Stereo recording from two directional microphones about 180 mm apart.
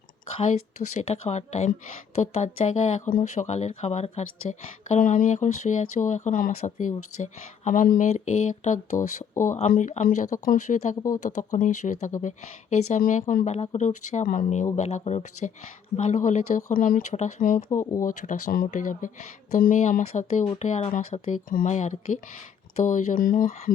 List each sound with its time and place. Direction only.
0.3 s speech: 40° left (ahead or behind)
17.7 s speech: 15° left (ahead or behind)
18.0 s speech: 45° left (ahead or behind)